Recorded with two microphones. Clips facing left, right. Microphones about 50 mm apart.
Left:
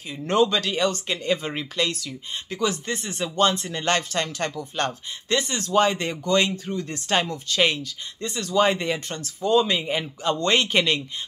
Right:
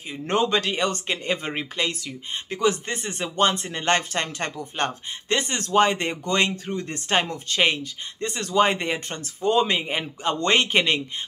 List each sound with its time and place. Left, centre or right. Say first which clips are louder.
0.3 s speech: left 1 dB; right